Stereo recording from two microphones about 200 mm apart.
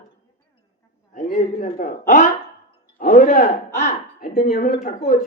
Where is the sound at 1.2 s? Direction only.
45° left (ahead or behind).